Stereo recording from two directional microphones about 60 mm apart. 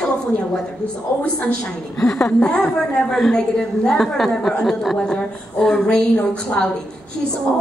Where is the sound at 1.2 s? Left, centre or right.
Centre.